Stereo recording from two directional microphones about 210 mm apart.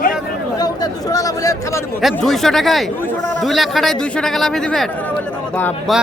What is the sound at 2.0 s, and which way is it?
Speech, centre (ahead or behind).